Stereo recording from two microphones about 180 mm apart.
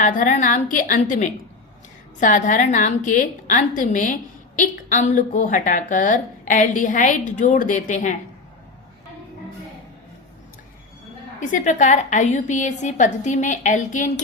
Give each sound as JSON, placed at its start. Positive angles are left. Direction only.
{"t": 0.0, "sound": "a woman's voice", "side_deg": 50}
{"t": 11.3, "sound": "a woman's voice", "side_deg": 45}